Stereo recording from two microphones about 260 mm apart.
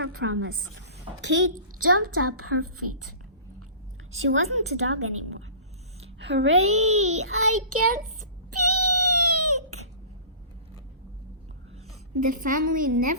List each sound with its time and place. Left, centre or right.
0.0 s a woman's voice: right
1.8 s a child's voice: right
4.3 s a child's voice: right
6.1 s a child's voice: right
8.4 s cat: right
9.3 s a sound: right
12.1 s a woman's voice: right
12.7 s a woman's voice: right